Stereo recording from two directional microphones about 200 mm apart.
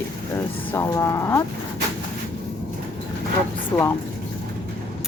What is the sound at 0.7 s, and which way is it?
Speech, 15° left (ahead or behind).